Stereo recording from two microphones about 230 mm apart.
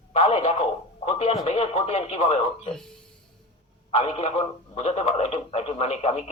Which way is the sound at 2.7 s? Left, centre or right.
Centre.